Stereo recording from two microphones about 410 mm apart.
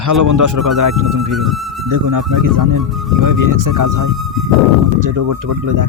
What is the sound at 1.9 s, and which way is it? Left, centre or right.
Speech, right.